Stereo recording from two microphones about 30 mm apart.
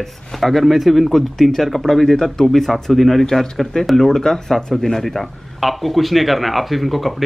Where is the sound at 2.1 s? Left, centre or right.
Centre.